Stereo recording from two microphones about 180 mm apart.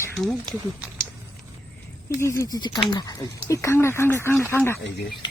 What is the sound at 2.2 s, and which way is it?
Speech, 15° left (ahead or behind).